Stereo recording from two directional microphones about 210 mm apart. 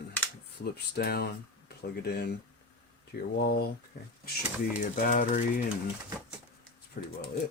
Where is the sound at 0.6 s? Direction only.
50° left (ahead or behind).